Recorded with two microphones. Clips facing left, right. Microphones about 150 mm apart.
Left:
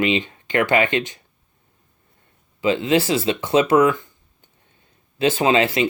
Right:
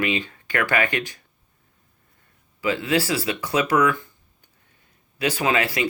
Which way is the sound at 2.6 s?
20° left (ahead or behind).